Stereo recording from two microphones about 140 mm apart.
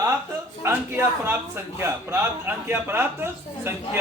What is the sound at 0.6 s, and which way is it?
A man's voice, 15° right (ahead or behind).